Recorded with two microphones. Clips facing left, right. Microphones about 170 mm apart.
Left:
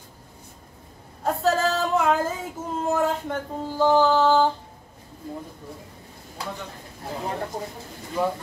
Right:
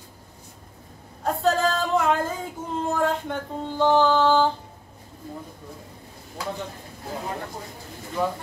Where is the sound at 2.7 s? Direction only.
5° left (ahead or behind).